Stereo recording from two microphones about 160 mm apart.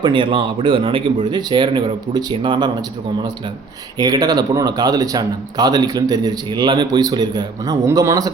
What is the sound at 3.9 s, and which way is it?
Speech, 25° right (ahead or behind).